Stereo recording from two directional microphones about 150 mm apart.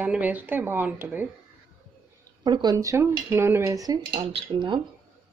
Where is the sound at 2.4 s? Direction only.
30° right (ahead or behind).